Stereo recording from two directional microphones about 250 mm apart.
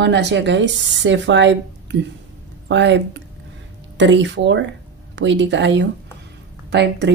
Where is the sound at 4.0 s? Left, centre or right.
Right.